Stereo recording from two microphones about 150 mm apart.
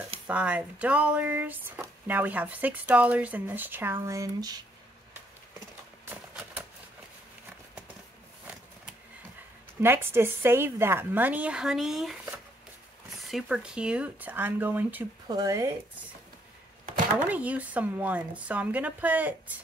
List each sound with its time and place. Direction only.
0.3 s speech: 10° right (ahead or behind); by 4.6 s 25° right (ahead or behind)
9.8 s speech: 15° right (ahead or behind)
15.2 s speech: 25° right (ahead or behind)
17.3 s speech: 10° right (ahead or behind)